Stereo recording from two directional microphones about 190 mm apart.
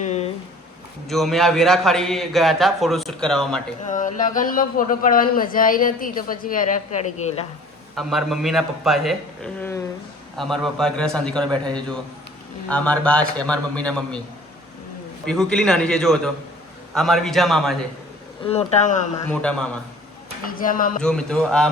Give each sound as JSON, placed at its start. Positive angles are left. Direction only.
{"t": 0.0, "sound": "a sound", "side_deg": 35}
{"t": 1.0, "sound": "a man's voice", "side_deg": 0}
{"t": 3.8, "sound": "speech", "side_deg": 40}
{"t": 7.2, "sound": "speech", "side_deg": 35}
{"t": 7.9, "sound": "a man's voice", "side_deg": 0}
{"t": 15.3, "sound": "a man's voice", "side_deg": 5}
{"t": 18.4, "sound": "speech", "side_deg": 35}
{"t": 19.3, "sound": "a man's voice", "side_deg": 5}
{"t": 20.4, "sound": "speech", "side_deg": 45}
{"t": 21.0, "sound": "a man's voice", "side_deg": 5}